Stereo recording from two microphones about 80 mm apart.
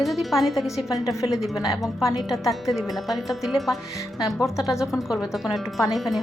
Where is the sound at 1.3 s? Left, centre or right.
Centre.